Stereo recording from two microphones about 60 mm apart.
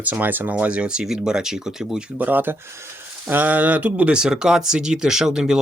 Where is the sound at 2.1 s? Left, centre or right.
Right.